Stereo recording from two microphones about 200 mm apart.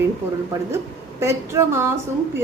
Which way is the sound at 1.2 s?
15° right (ahead or behind).